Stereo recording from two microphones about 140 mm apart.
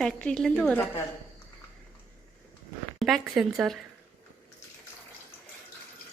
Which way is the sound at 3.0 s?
Centre (ahead or behind).